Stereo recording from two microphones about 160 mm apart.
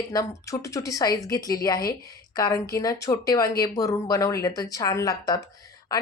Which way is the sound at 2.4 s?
20° left (ahead or behind).